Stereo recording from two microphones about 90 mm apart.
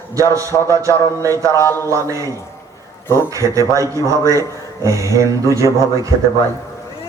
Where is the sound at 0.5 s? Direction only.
40° left (ahead or behind).